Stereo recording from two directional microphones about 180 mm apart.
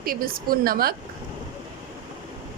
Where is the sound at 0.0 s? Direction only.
55° right (ahead or behind).